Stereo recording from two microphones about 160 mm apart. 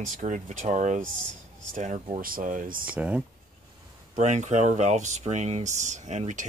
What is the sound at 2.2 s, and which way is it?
Speech, 60° right (ahead or behind).